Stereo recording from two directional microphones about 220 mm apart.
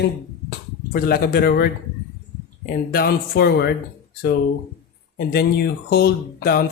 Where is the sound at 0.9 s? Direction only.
40° left (ahead or behind).